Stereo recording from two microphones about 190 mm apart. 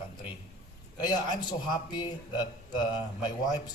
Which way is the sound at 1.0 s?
20° left (ahead or behind).